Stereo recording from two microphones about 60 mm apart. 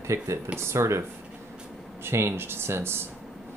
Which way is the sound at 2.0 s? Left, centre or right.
Right.